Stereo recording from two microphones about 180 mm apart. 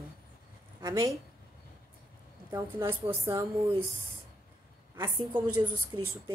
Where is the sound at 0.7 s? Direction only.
20° right (ahead or behind).